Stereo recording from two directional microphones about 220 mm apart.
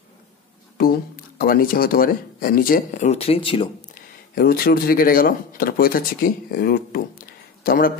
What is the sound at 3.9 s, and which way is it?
Speech, 45° left (ahead or behind).